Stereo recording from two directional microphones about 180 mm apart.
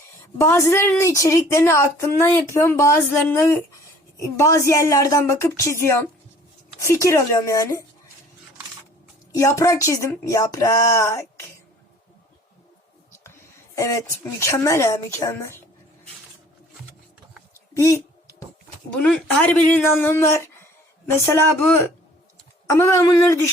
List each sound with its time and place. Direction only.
0.3 s a woman's voice: 15° left (ahead or behind)
9.3 s a woman's voice: 15° left (ahead or behind)
13.1 s speech: 15° left (ahead or behind)
17.7 s a sound: 15° left (ahead or behind)
18.9 s a woman's voice: 5° left (ahead or behind)